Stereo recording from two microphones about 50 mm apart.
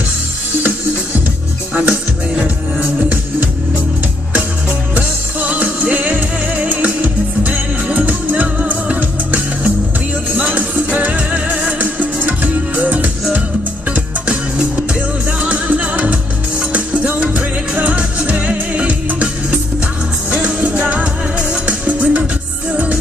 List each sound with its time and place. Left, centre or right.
1.7 s music: right
4.9 s music: right
20.2 s music: centre